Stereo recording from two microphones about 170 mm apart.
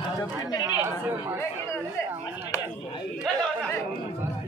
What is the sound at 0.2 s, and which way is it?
Speech, 20° left (ahead or behind).